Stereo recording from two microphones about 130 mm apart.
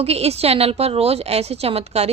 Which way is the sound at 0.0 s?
50° right (ahead or behind).